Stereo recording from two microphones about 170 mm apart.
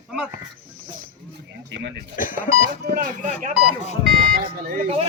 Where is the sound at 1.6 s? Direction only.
90° right.